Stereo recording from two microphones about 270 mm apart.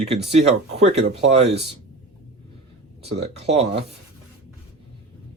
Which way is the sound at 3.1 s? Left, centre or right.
Right.